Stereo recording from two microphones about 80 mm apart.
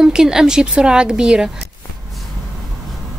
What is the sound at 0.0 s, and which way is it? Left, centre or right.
Speech, centre.